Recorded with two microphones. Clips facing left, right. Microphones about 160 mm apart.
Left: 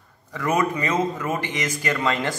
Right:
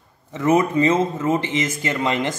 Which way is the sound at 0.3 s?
25° right (ahead or behind).